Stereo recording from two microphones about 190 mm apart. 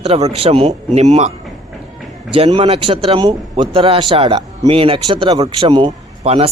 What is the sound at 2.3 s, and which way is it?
A man's voice, 25° right (ahead or behind).